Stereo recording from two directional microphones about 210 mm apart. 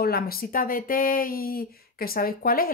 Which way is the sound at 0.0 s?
45° left (ahead or behind).